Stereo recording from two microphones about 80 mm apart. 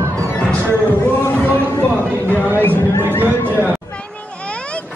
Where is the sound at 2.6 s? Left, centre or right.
Left.